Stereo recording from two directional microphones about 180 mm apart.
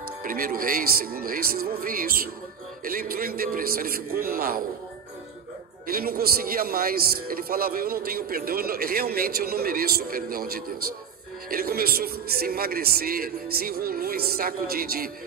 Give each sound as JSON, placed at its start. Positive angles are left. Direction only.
{"t": 0.2, "sound": "speech", "side_deg": -55}
{"t": 5.9, "sound": "speech", "side_deg": -55}